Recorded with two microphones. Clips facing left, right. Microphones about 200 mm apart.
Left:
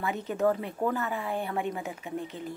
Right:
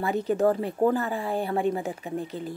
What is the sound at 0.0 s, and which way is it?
Speech, 35° right (ahead or behind).